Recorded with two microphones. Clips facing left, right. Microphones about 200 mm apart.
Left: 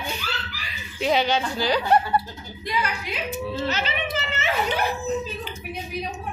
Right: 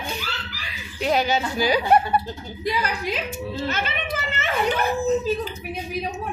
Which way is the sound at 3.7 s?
50° right (ahead or behind).